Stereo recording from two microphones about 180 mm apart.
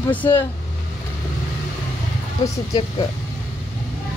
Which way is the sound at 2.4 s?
20° left (ahead or behind).